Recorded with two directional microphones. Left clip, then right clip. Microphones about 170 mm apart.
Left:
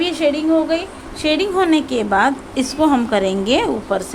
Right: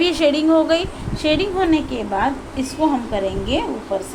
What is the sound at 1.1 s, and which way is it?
Speech, 5° left (ahead or behind).